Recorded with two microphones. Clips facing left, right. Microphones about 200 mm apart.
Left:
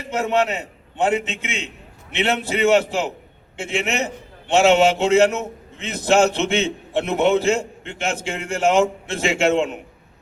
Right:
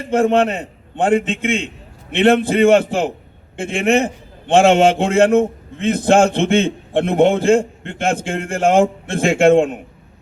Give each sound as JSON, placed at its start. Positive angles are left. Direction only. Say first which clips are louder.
{"t": 0.0, "sound": "a man's voice", "louder": "right 6 dB", "side_deg": -50}